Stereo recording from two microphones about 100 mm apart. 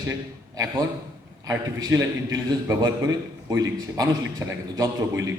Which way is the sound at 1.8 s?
40° right (ahead or behind).